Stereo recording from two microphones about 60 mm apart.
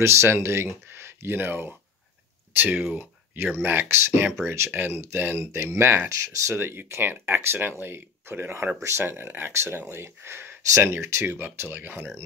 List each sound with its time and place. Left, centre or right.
0.0 s speech: right
3.5 s speech: right
4.6 s speech: right
6.0 s speech: right
6.5 s speech: right